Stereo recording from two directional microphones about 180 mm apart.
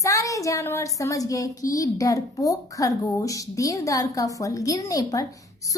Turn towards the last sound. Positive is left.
turn(degrees=20)  # may be behind; listen again after turning